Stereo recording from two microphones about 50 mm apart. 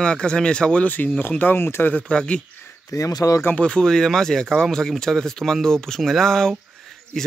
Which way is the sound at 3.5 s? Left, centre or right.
Centre.